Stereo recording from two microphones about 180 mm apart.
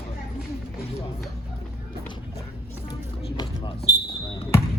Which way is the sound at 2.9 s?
25° left (ahead or behind).